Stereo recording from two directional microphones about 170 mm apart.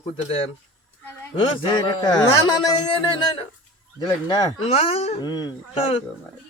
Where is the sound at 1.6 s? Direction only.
30° left (ahead or behind).